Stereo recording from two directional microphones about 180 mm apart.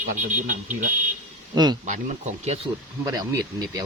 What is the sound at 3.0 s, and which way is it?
Speech, 20° right (ahead or behind).